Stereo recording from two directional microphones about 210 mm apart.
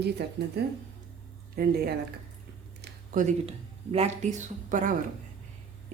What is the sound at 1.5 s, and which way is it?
Speech, 45° right (ahead or behind).